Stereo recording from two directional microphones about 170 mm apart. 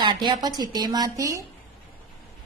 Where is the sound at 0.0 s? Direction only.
25° right (ahead or behind).